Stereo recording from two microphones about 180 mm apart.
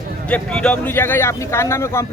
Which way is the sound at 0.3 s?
5° left (ahead or behind).